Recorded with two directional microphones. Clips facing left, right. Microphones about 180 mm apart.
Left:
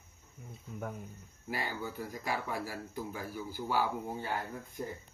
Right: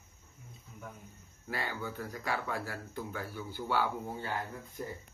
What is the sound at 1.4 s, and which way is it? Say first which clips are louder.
Speech: even; 10° left (ahead or behind).